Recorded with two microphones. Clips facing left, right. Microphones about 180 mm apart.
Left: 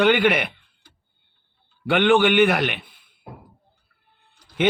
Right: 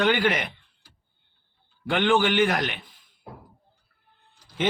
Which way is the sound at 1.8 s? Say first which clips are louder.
Left 5 dB; 60° left (ahead or behind).